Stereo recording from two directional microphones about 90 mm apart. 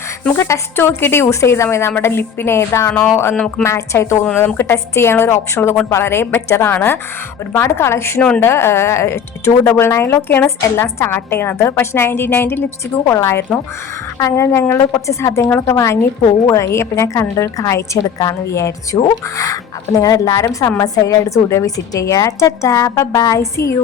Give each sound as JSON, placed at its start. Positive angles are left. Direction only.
{"t": 0.3, "sound": "a woman's voice", "side_deg": 35}